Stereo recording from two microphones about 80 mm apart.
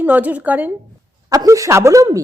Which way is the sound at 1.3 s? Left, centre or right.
Right.